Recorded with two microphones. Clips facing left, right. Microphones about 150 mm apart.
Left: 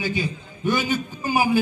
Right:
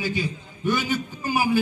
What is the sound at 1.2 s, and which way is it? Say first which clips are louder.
Speech: left 2 dB; 15° left (ahead or behind).